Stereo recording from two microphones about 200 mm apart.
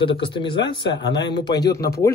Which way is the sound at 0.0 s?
25° left (ahead or behind).